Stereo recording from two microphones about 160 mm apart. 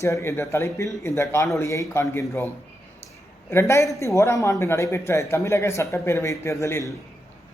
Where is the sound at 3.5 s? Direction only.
15° left (ahead or behind).